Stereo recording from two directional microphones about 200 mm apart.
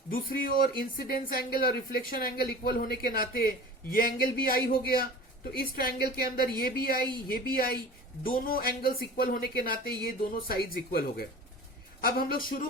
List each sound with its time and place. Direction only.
0.1 s speech: 45° left (ahead or behind)
8.2 s speech: 45° left (ahead or behind)